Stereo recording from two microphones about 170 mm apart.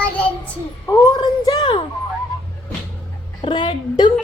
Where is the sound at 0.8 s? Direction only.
20° left (ahead or behind).